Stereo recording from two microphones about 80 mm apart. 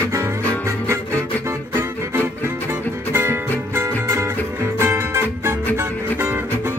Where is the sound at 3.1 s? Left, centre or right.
Right.